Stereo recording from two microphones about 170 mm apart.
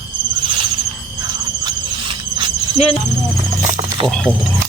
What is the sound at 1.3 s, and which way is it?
Squeal, 25° right (ahead or behind).